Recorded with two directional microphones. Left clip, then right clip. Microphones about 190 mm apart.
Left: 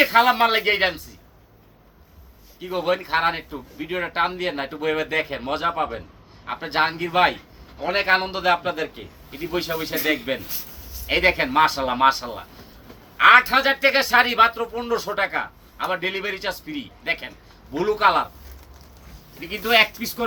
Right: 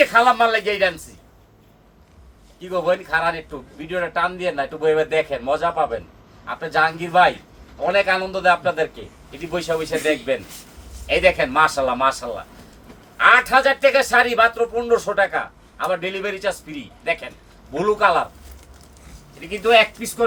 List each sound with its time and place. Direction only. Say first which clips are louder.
0.0 s speech: right 2 dB; 15° right (ahead or behind)
2.6 s speech: right 3 dB; 15° right (ahead or behind)
19.5 s speech: right 3 dB; 15° right (ahead or behind)